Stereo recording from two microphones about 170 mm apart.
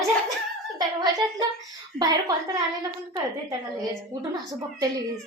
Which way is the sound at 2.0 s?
20° right (ahead or behind).